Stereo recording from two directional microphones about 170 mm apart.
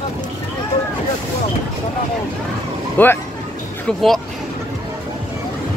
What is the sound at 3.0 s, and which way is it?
Speech, 10° left (ahead or behind).